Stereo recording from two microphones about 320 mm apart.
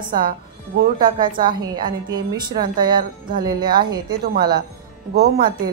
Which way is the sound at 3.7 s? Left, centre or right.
Centre.